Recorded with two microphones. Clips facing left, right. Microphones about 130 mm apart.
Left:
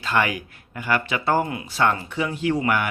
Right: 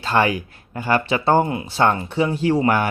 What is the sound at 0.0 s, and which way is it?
Speech, 30° right (ahead or behind).